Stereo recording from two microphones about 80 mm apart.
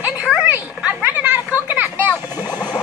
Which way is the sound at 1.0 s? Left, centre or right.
Right.